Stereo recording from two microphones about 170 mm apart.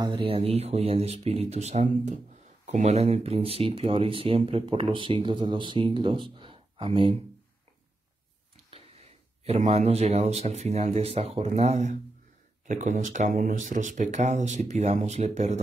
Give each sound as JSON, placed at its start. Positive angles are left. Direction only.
{"t": 0.0, "sound": "speech", "side_deg": -30}
{"t": 8.6, "sound": "speech", "side_deg": -40}